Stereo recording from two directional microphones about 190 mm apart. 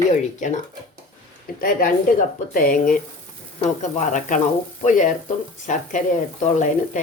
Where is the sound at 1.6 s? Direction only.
50° left (ahead or behind).